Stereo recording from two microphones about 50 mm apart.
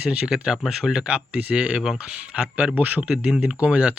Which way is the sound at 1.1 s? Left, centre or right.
Right.